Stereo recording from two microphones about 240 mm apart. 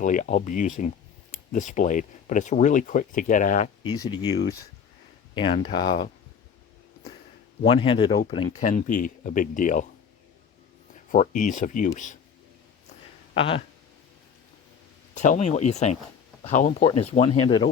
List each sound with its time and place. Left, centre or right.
0.0 s speech: left
4.0 s speech: centre
5.8 s speech: left
7.6 s speech: left
8.6 s speech: left
11.1 s speech: left
13.3 s speech: left
15.1 s speech: left